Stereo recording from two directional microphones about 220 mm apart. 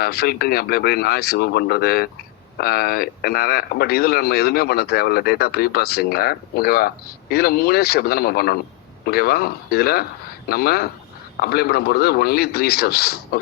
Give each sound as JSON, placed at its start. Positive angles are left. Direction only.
{"t": 0.0, "sound": "speech", "side_deg": 45}